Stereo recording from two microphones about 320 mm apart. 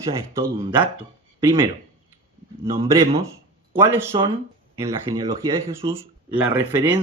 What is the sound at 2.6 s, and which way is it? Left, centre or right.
A man's voice, centre.